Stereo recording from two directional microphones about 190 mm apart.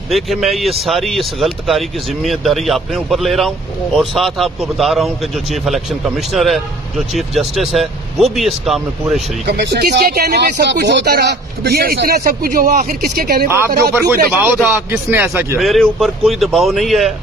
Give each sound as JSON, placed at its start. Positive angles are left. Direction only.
{"t": 0.1, "sound": "speech", "side_deg": 0}
{"t": 9.5, "sound": "speech", "side_deg": -60}
{"t": 13.1, "sound": "speech", "side_deg": -55}
{"t": 13.5, "sound": "a man's voice", "side_deg": -15}
{"t": 15.6, "sound": "speech", "side_deg": 0}